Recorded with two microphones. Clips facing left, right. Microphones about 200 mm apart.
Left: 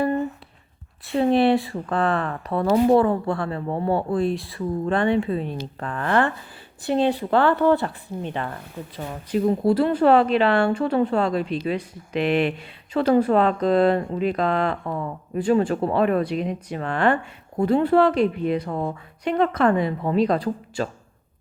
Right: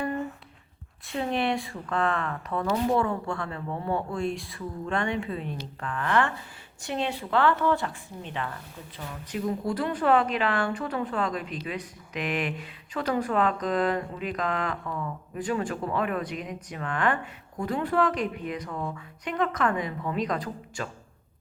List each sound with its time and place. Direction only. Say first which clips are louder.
1.0 s speech: left 9 dB; 35° left (ahead or behind)
15.4 s speech: left 9 dB; 25° left (ahead or behind)